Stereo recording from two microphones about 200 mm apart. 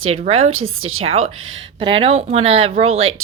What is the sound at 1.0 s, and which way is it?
Speech, 30° right (ahead or behind).